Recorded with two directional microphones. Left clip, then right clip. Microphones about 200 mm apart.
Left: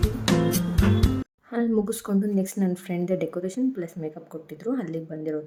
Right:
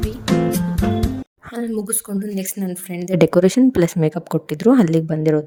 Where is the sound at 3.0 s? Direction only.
50° right (ahead or behind).